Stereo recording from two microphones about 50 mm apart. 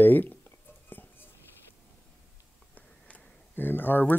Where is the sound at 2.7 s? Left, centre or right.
Left.